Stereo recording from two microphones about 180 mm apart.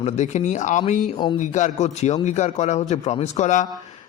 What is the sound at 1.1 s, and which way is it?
Speech, 25° left (ahead or behind).